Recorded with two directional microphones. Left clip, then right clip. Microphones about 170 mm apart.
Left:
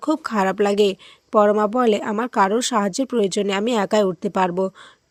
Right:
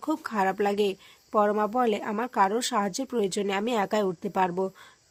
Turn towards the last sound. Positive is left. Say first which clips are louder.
# left 6 dB
turn(degrees=30)  # may be behind; listen again after turning